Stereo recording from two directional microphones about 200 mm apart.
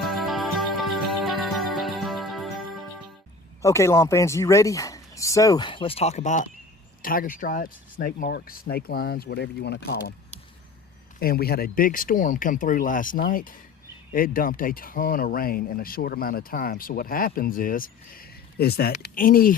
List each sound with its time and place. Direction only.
0.0 s music: centre (ahead or behind)
3.6 s speech: 15° left (ahead or behind); by 10.2 s 55° left (ahead or behind)
11.2 s speech: 50° left (ahead or behind)